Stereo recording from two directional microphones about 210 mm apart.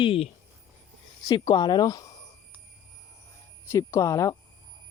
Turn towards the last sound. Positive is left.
turn(degrees=15)  # may be behind; listen again after turning